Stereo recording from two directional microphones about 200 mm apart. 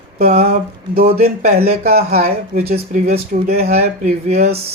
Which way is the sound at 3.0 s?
30° right (ahead or behind).